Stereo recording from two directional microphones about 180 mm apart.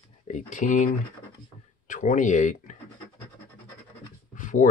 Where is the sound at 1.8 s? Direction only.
45° left (ahead or behind).